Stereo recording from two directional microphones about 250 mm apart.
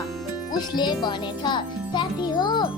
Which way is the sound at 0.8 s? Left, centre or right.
Centre.